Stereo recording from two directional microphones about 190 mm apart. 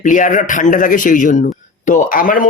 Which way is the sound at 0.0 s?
45° left (ahead or behind).